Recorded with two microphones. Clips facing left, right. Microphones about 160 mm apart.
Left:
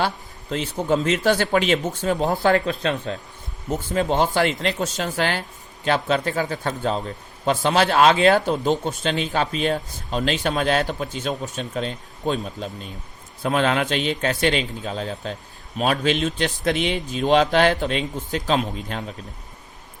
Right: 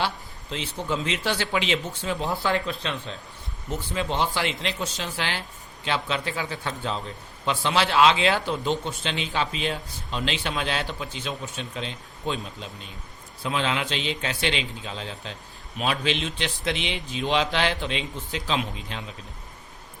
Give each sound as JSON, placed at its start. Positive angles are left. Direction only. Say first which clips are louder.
{"t": 0.5, "sound": "a man's voice", "louder": "left 7 dB", "side_deg": 45}